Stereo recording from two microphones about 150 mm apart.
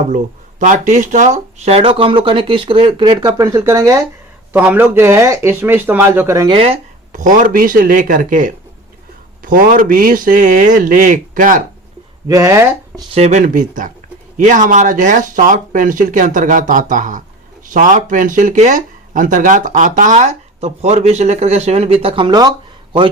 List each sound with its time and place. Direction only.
0.6 s speech: 55° right (ahead or behind); by 4.0 s 20° right (ahead or behind)
4.5 s speech: 10° right (ahead or behind)
6.5 s speech: 40° right (ahead or behind)
7.1 s speech: 60° right (ahead or behind)
12.3 s speech: 20° right (ahead or behind)
13.1 s speech: 45° right (ahead or behind)
13.4 s speech: 60° right (ahead or behind); by 23.0 s 30° right (ahead or behind)